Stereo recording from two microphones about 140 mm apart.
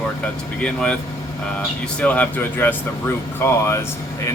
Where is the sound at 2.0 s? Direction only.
10° left (ahead or behind).